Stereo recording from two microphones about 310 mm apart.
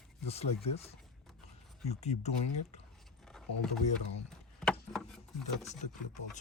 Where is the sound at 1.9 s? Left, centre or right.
Left.